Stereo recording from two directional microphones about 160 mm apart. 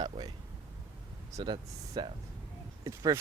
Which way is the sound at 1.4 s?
25° right (ahead or behind).